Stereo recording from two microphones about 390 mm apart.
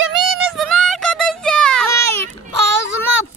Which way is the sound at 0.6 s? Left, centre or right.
Centre.